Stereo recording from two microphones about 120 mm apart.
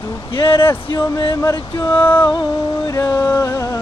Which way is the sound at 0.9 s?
35° left (ahead or behind).